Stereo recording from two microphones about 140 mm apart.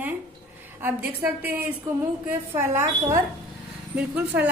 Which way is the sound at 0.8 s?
15° right (ahead or behind).